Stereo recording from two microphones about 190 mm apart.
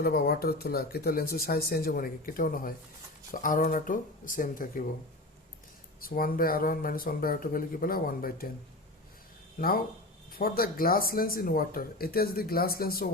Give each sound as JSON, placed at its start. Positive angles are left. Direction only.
{"t": 0.0, "sound": "speech", "side_deg": 55}
{"t": 6.0, "sound": "speech", "side_deg": 50}
{"t": 9.6, "sound": "speech", "side_deg": 50}